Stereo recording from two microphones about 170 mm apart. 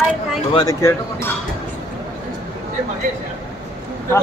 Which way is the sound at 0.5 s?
20° left (ahead or behind).